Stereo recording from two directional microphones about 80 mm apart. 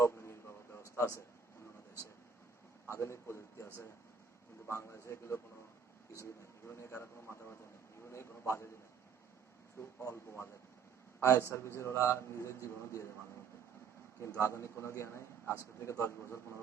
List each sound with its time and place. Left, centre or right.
0.0 s a sound: left
2.8 s a man's voice: left
10.0 s a man's voice: left
14.2 s a man's voice: left